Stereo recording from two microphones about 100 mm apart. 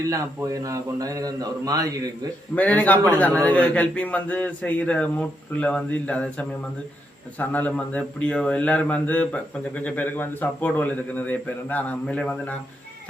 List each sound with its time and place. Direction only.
0.4 s a man's voice: 35° right (ahead or behind)
2.6 s a man's voice: 15° left (ahead or behind)